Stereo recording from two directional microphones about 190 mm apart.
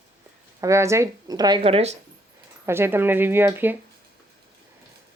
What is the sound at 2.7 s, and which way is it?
Speech, 10° right (ahead or behind).